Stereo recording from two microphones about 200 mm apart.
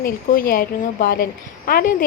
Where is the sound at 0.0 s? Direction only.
45° left (ahead or behind).